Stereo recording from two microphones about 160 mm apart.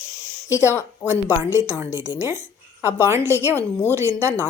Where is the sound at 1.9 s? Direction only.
20° left (ahead or behind).